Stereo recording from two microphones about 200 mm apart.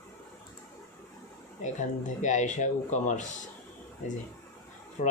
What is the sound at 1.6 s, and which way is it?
Speech, 40° left (ahead or behind).